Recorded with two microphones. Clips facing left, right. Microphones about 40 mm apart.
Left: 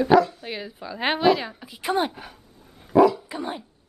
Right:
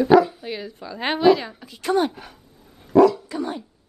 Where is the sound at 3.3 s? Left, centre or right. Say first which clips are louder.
Right 3 dB; centre.